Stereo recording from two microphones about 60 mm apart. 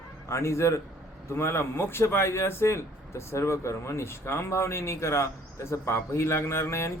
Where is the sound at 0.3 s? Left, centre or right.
Left.